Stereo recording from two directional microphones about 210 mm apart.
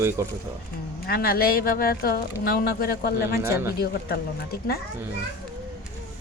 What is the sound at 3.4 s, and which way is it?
Speech, 15° right (ahead or behind).